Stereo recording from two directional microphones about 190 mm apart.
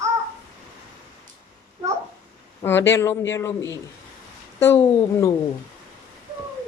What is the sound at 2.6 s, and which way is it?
Speech, 10° left (ahead or behind).